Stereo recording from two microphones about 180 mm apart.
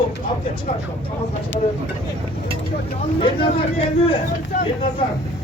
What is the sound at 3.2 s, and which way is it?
Speech, 30° left (ahead or behind).